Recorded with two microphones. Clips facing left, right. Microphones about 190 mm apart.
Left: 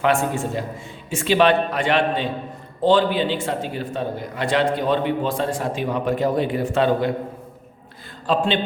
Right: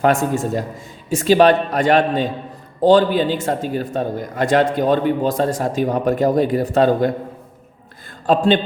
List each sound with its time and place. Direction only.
0.0 s a man's voice: 40° right (ahead or behind)
8.3 s a man's voice: 45° right (ahead or behind)